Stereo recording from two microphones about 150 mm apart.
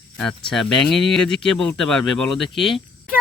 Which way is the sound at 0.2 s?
5° left (ahead or behind).